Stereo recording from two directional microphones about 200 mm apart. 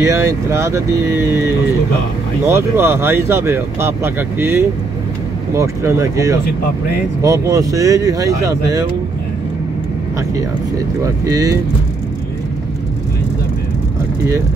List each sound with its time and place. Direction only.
0.0 s speech: 15° right (ahead or behind)
11.2 s speech: 20° right (ahead or behind)